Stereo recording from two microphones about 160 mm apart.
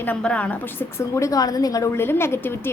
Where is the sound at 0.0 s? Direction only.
10° left (ahead or behind).